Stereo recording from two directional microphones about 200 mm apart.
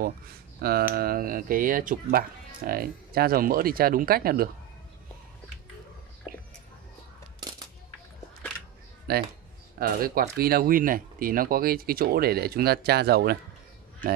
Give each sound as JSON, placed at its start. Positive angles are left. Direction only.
{"t": 0.6, "sound": "speech", "side_deg": -50}
{"t": 6.3, "sound": "a sound", "side_deg": -5}
{"t": 9.1, "sound": "speech", "side_deg": -50}